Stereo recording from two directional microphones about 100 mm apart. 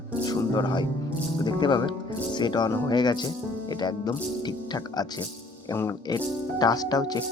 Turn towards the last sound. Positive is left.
turn(degrees=40)  # may be behind; listen again after turning